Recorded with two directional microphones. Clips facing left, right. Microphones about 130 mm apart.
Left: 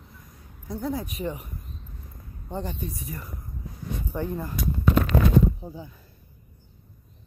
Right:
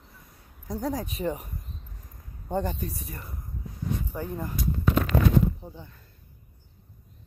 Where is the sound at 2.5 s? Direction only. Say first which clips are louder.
Right 4 dB; 45° right (ahead or behind).